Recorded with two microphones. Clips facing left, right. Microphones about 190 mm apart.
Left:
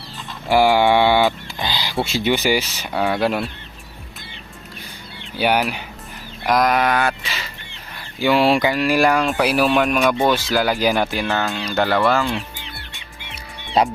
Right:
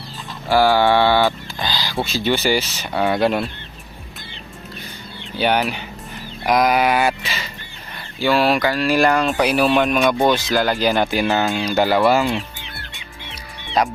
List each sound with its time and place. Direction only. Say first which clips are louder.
0.4 s speech: even; 20° left (ahead or behind)
5.4 s speech: even; 5° left (ahead or behind)
8.2 s speech: left 1 dB; 20° left (ahead or behind); by 11.2 s 5° left (ahead or behind)
11.2 s speech: right 3 dB; 10° right (ahead or behind)
13.8 s speech: left 2 dB; 30° left (ahead or behind)